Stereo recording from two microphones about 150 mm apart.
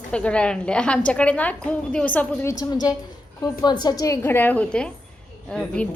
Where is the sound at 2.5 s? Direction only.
25° left (ahead or behind).